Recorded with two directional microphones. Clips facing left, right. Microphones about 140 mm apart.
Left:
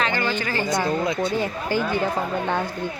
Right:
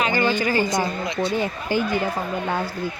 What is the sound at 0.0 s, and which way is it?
A woman's voice, 15° right (ahead or behind).